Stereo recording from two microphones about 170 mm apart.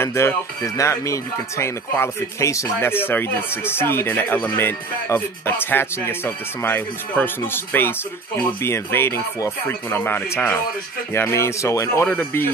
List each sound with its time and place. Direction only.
0.0 s speech: 15° left (ahead or behind)